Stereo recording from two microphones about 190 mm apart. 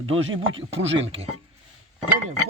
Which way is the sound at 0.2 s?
90° right.